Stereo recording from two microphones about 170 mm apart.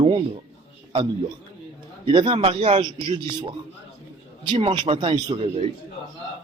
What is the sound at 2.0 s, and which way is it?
A man's voice, 30° right (ahead or behind).